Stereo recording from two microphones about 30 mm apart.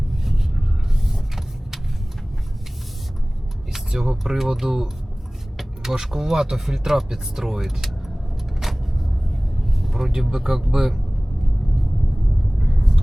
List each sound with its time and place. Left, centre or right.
0.1 s a sound: centre
1.0 s vehicle: centre
3.7 s a sound: centre
4.5 s speech: centre
5.9 s speech: centre
8.6 s a sound: centre
9.6 s vehicle: centre
10.1 s speech: centre
12.5 s vehicle: centre